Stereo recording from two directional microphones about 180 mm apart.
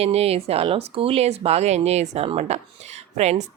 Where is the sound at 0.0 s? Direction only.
35° right (ahead or behind).